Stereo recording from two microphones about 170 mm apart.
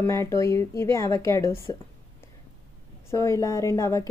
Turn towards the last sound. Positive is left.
turn(degrees=20)  # may be behind; listen again after turning